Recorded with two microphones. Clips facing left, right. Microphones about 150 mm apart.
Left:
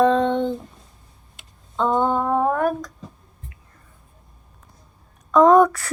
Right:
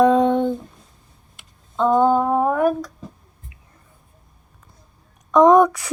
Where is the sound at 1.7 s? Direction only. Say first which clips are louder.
Right 4 dB; 5° right (ahead or behind).